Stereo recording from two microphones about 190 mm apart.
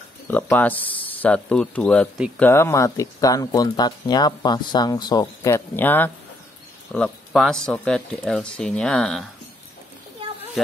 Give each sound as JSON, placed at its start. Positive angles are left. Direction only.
{"t": 0.3, "sound": "speech", "side_deg": 10}